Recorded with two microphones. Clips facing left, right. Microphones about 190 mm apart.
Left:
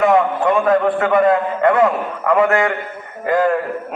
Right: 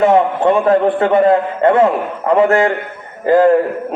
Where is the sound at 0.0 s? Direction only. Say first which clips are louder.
Right 3 dB; 30° right (ahead or behind).